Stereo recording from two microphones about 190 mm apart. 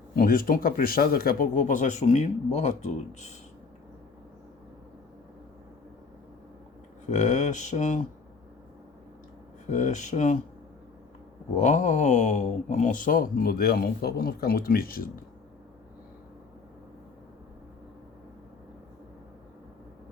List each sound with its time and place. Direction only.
0.2 s speech: 50° left (ahead or behind)
7.1 s speech: 40° left (ahead or behind)
9.6 s speech: 40° left (ahead or behind)
11.5 s speech: 40° left (ahead or behind)